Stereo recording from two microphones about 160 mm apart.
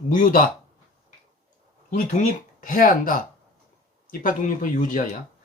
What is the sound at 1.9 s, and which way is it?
Speech, 55° left (ahead or behind).